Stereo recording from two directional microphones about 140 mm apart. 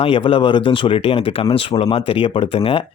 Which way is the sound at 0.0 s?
40° left (ahead or behind).